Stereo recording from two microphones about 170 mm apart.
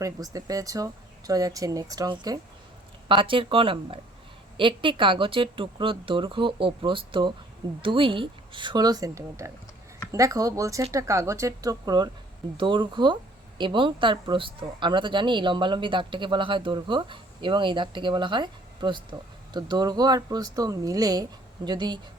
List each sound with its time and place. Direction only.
0.0 s speech: 20° right (ahead or behind)